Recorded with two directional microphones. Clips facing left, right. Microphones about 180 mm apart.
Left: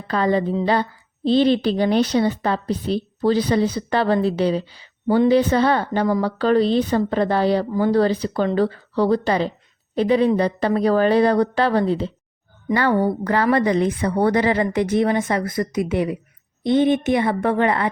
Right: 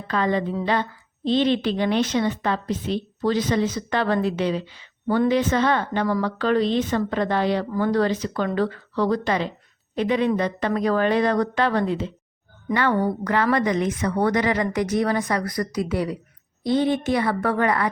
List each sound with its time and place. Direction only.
0.1 s a woman's voice: 35° left (ahead or behind)